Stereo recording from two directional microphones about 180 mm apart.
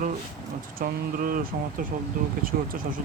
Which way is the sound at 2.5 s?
55° right (ahead or behind).